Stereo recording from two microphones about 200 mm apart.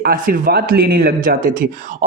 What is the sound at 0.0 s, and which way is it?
A woman's voice, 50° right (ahead or behind).